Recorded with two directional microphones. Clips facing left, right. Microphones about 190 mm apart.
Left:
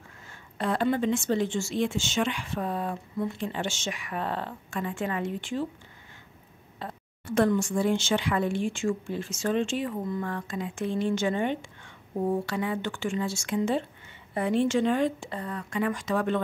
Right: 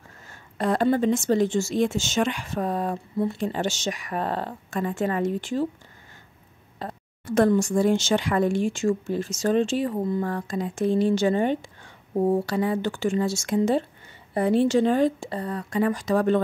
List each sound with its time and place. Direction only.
0.3 s speech: 40° right (ahead or behind)
6.8 s speech: 40° right (ahead or behind)